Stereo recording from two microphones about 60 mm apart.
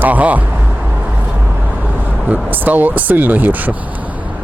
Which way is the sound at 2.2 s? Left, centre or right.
Right.